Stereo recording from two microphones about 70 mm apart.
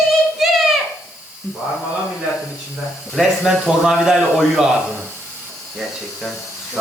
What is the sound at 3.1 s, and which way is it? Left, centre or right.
Speech, centre.